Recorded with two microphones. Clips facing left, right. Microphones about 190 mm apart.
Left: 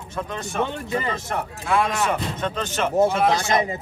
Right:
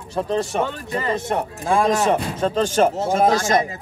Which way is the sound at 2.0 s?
30° right (ahead or behind).